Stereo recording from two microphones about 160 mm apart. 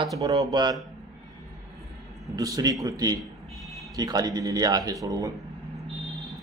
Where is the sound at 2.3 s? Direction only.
20° right (ahead or behind).